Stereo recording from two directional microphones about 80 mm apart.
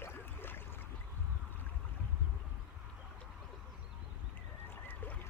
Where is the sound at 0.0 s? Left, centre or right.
Left.